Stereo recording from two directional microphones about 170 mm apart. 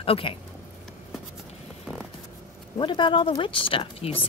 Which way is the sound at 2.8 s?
30° left (ahead or behind).